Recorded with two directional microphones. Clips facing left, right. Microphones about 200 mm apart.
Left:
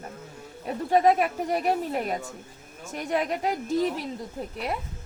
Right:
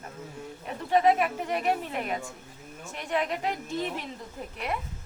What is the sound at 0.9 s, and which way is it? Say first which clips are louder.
A woman's voice: left 2 dB; 40° left (ahead or behind).